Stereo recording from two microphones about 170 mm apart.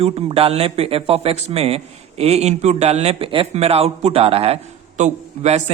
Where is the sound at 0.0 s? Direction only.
35° right (ahead or behind).